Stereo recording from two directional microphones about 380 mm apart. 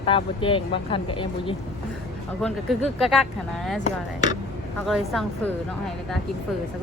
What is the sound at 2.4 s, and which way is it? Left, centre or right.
Speech, centre.